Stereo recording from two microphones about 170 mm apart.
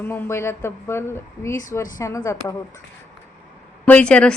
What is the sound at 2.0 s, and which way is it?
Speech, 20° left (ahead or behind).